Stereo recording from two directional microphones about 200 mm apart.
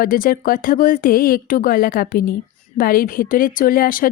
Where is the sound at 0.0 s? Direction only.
45° left (ahead or behind).